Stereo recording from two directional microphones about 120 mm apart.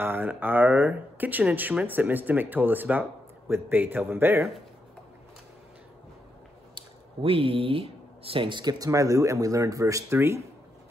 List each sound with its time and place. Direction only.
0.0 s speech: 20° right (ahead or behind)
7.2 s speech: 50° right (ahead or behind); by 10.4 s 20° right (ahead or behind)